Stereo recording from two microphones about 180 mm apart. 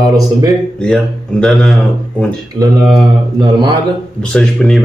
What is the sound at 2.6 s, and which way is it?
Speech, 20° right (ahead or behind).